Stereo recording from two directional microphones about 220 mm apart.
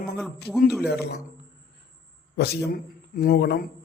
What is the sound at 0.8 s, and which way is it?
Speech, 45° left (ahead or behind).